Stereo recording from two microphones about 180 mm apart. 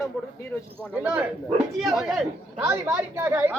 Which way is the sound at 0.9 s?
10° right (ahead or behind).